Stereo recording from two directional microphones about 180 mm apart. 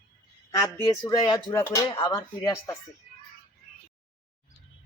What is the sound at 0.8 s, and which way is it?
Speech, 20° left (ahead or behind).